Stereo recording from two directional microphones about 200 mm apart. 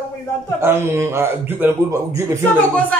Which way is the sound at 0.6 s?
10° right (ahead or behind).